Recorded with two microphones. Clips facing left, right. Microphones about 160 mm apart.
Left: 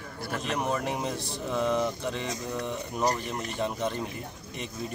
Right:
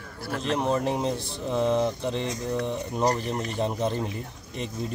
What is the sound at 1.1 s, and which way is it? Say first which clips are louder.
Speech: right 3 dB; 30° right (ahead or behind).